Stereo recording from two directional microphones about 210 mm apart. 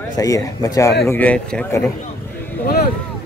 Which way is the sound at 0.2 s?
15° left (ahead or behind).